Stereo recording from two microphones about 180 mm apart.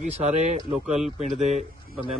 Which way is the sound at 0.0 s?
40° right (ahead or behind).